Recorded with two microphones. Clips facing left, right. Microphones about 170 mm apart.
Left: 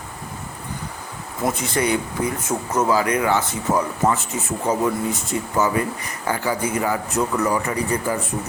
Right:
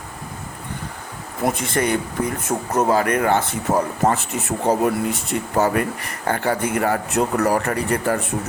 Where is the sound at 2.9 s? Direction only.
55° right (ahead or behind).